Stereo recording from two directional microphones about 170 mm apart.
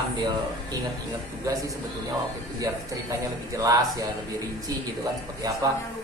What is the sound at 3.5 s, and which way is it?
Speech, 20° right (ahead or behind).